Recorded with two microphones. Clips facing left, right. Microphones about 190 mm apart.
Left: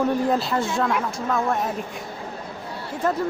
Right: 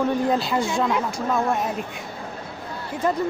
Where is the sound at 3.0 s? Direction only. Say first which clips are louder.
Even; centre (ahead or behind).